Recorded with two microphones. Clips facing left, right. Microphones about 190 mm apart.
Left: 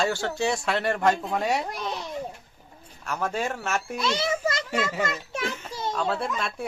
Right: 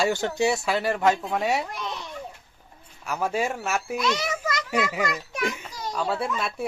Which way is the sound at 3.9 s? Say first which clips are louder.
Left 1 dB; 30° left (ahead or behind).